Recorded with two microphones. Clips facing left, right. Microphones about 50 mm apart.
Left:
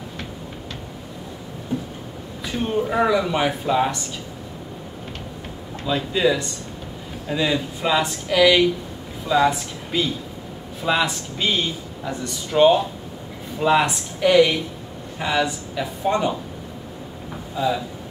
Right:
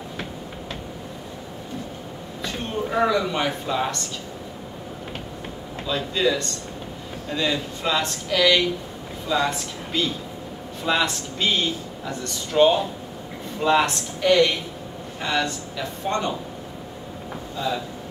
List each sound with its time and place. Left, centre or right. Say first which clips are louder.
2.4 s speech: left 5 dB; centre
5.9 s speech: left 3 dB; centre
17.6 s speech: left 4 dB; centre